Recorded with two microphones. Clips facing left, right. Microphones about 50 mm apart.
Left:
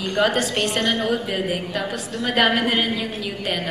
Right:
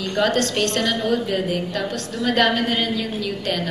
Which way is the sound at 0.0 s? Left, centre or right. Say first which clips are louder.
Even; centre.